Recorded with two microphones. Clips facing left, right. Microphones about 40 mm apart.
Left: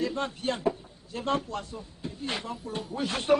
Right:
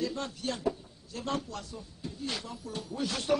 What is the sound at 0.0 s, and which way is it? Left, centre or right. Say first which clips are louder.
A man's voice: left 4 dB; left.